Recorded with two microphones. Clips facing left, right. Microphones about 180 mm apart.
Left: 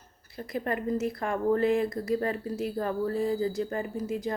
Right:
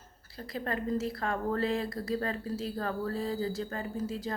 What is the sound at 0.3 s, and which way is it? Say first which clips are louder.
Speech: left 4 dB; 20° left (ahead or behind).